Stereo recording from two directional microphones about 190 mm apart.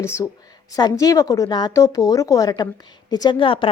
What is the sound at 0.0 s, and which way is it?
A woman's voice, 15° left (ahead or behind).